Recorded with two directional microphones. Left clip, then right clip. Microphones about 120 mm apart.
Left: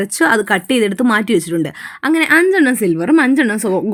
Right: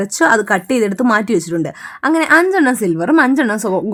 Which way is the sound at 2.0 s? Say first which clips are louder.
Right 1 dB; 25° left (ahead or behind).